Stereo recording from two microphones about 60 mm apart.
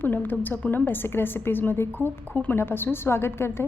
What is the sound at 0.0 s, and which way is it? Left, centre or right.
A woman's voice, left.